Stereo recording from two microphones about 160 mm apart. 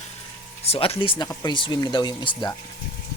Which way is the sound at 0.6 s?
40° left (ahead or behind).